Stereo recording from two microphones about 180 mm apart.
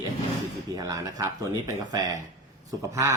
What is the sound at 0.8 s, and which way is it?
Speech, 20° right (ahead or behind).